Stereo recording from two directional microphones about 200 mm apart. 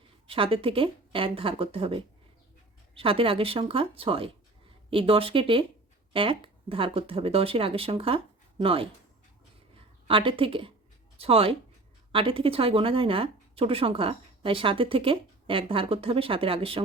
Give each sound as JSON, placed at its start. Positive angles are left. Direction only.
{"t": 0.3, "sound": "a woman's voice", "side_deg": -25}
{"t": 10.1, "sound": "a woman's voice", "side_deg": -25}